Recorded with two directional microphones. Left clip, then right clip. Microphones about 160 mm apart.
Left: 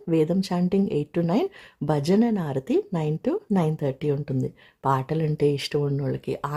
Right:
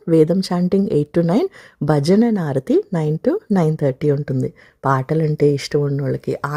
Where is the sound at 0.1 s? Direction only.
30° right (ahead or behind).